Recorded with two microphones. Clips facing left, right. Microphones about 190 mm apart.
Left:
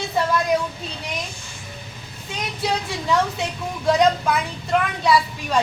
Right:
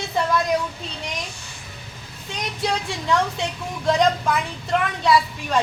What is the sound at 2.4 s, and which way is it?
A woman's voice, 5° left (ahead or behind).